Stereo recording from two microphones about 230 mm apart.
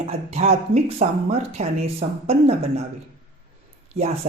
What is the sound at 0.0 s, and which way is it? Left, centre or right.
Speech, right.